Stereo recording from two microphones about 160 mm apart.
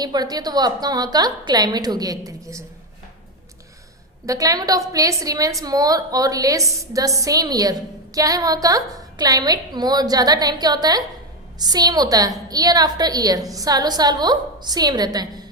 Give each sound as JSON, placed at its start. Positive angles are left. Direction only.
{"t": 0.0, "sound": "a woman's voice", "side_deg": -25}
{"t": 4.3, "sound": "a woman's voice", "side_deg": -20}